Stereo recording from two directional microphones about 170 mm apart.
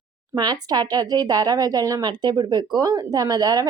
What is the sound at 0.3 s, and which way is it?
Speech, 25° right (ahead or behind).